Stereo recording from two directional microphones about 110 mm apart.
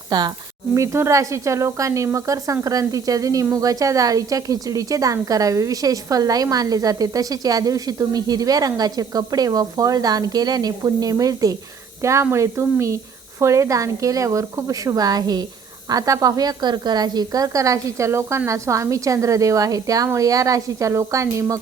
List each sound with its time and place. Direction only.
0.1 s speech: 40° right (ahead or behind)
0.7 s a woman's voice: 25° right (ahead or behind)